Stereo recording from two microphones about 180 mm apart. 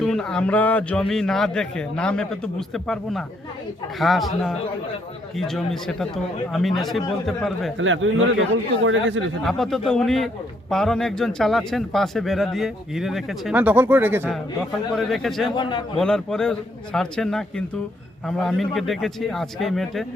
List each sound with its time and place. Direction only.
0.0 s speech: 5° left (ahead or behind)
7.8 s a man's voice: 90° right
9.4 s speech: centre (ahead or behind)
14.9 s speech: centre (ahead or behind)